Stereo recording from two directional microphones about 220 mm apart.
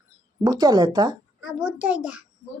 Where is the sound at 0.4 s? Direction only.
15° right (ahead or behind).